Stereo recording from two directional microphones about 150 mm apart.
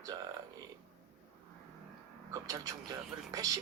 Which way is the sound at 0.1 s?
25° right (ahead or behind).